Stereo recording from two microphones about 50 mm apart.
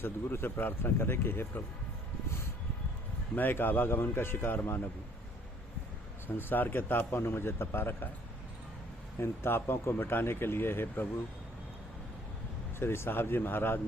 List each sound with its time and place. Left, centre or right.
0.0 s speech: left
3.3 s speech: left
6.2 s speech: left
9.1 s speech: left
12.8 s speech: left